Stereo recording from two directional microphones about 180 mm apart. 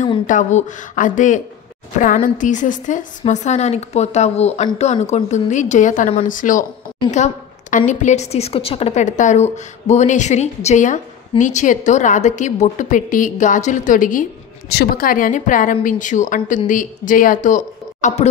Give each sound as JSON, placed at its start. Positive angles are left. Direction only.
{"t": 0.3, "sound": "a woman's voice", "side_deg": 40}
{"t": 7.7, "sound": "a woman's voice", "side_deg": 40}
{"t": 14.7, "sound": "a woman's voice", "side_deg": 60}